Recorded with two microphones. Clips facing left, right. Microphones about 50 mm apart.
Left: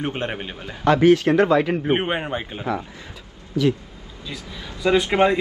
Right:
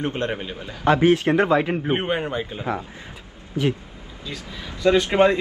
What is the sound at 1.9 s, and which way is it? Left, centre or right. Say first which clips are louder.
Speech: left 1 dB; centre.